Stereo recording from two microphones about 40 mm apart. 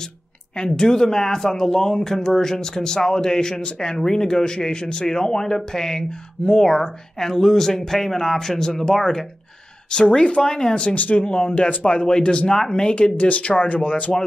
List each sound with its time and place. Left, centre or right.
0.7 s speech: centre
9.8 s speech: left
11.0 s speech: left
11.2 s speech: left